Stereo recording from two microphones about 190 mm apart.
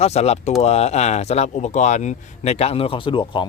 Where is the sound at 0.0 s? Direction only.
35° left (ahead or behind).